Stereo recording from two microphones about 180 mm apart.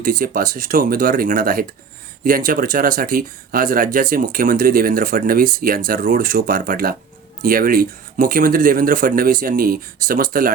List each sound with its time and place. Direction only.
0.0 s speech: 50° right (ahead or behind)